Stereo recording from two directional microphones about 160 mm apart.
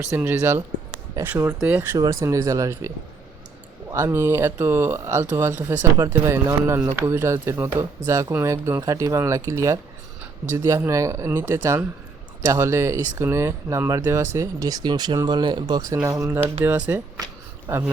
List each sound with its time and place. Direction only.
0.1 s speech: 15° right (ahead or behind)